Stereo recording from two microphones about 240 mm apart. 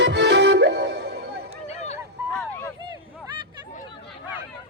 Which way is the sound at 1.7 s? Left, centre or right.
Left.